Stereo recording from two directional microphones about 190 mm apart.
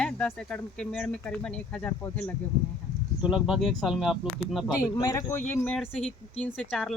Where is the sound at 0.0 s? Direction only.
5° left (ahead or behind).